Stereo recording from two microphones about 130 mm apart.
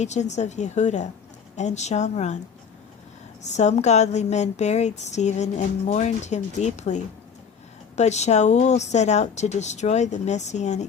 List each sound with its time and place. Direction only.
0.0 s speech: 60° left (ahead or behind)
3.5 s speech: 60° left (ahead or behind)